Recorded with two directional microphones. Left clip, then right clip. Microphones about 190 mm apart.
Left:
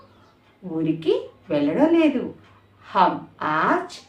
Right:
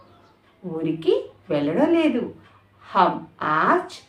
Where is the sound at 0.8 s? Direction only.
15° right (ahead or behind).